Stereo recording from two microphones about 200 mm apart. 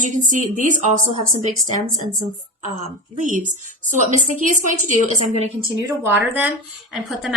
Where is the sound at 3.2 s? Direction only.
40° right (ahead or behind).